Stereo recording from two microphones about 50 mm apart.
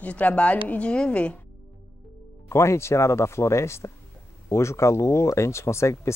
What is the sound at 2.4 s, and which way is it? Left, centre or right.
Speech, left.